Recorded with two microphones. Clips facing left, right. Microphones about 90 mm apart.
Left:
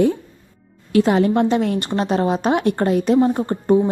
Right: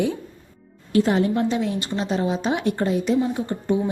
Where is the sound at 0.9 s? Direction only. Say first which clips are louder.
Left 4 dB; 80° left.